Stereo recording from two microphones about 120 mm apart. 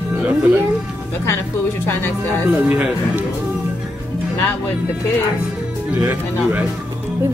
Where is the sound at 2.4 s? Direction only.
10° right (ahead or behind).